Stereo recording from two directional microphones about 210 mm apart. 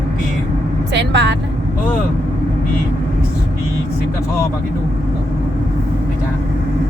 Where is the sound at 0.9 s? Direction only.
55° right (ahead or behind).